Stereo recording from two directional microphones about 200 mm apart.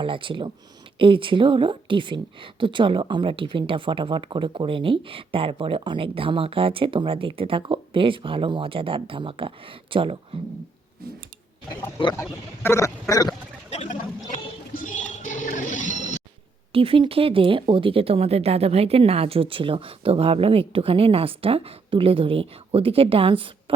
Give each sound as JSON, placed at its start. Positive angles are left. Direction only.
{"t": 0.0, "sound": "a woman's voice", "side_deg": -25}
{"t": 11.9, "sound": "speech", "side_deg": 20}
{"t": 13.7, "sound": "a sound", "side_deg": 35}
{"t": 15.2, "sound": "music", "side_deg": 40}
{"t": 16.7, "sound": "a woman's voice", "side_deg": -25}